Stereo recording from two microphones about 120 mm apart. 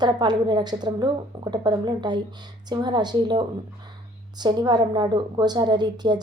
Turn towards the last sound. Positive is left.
turn(degrees=-35)  # may be behind; listen again after turning